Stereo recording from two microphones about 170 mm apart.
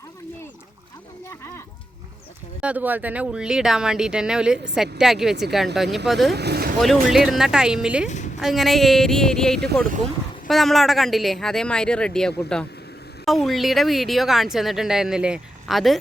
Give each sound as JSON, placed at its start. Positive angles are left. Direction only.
{"t": 2.6, "sound": "speech", "side_deg": -10}
{"t": 6.3, "sound": "speech", "side_deg": -70}
{"t": 6.8, "sound": "speech", "side_deg": 0}
{"t": 8.0, "sound": "a woman's voice", "side_deg": 45}
{"t": 8.4, "sound": "speech", "side_deg": 0}